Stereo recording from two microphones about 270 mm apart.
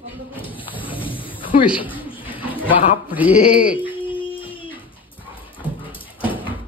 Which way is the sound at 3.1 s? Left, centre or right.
Centre.